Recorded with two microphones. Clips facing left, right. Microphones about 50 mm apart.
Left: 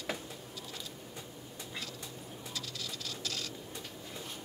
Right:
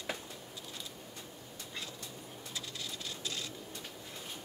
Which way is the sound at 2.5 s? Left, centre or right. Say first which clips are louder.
Even; right.